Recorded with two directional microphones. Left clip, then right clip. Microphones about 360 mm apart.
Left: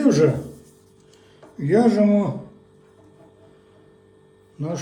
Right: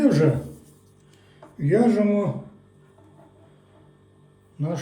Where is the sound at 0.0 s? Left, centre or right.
Centre.